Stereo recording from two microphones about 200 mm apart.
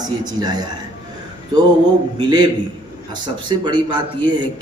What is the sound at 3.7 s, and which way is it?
Speech, 20° right (ahead or behind).